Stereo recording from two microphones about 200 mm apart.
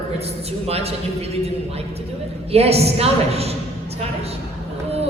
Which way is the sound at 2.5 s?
30° right (ahead or behind).